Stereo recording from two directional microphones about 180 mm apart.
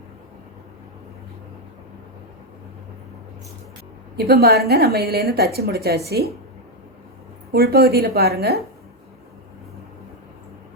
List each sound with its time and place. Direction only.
4.2 s a woman's voice: 60° right (ahead or behind)
7.5 s a woman's voice: 60° right (ahead or behind)